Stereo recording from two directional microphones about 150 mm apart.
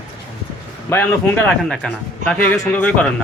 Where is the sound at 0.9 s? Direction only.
10° left (ahead or behind).